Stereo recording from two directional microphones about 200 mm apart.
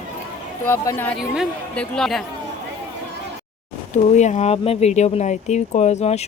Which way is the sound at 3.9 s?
35° left (ahead or behind).